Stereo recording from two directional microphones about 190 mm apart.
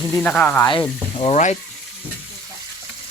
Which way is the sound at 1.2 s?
35° left (ahead or behind).